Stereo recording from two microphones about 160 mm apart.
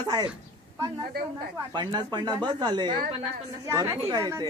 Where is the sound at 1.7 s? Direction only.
30° right (ahead or behind).